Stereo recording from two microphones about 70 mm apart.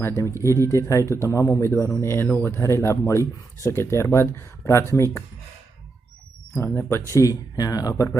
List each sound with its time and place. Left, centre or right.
0.2 s speech: left
6.7 s speech: left
7.1 s speech: left